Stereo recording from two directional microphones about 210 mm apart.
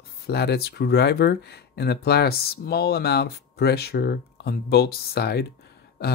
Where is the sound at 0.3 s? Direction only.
50° left (ahead or behind).